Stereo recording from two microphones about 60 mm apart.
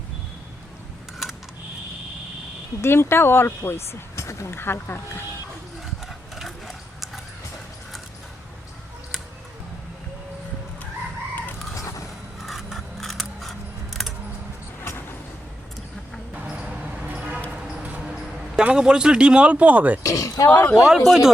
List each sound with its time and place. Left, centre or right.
2.8 s speech: left
4.1 s a sound: left
4.5 s speech: left
6.3 s a sound: centre
12.4 s scissors: centre
16.3 s a sound: centre
18.6 s speech: centre
20.0 s speech: left
20.7 s speech: centre